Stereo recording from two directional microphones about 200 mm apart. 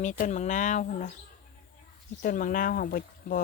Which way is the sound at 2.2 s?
45° left (ahead or behind).